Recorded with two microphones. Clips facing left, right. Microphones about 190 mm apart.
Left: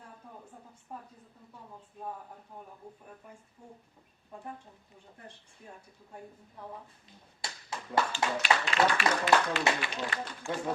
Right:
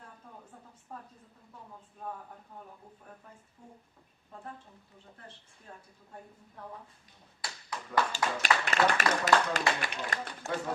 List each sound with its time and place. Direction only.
0.9 s a sound: 10° left (ahead or behind)
7.4 s clapping: 25° left (ahead or behind)
8.1 s speech: 45° right (ahead or behind)